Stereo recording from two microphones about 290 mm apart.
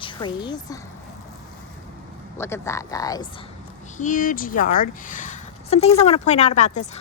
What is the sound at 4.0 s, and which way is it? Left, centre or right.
Speech, left.